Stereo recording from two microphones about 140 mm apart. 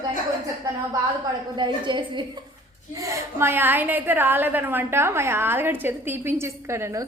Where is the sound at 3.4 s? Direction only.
15° right (ahead or behind).